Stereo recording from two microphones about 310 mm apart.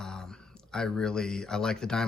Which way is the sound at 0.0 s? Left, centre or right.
Centre.